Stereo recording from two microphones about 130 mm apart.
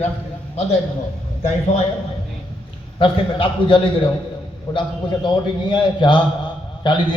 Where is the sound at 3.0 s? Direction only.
40° left (ahead or behind).